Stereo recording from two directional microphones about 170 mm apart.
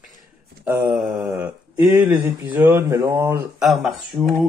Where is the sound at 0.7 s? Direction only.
20° right (ahead or behind).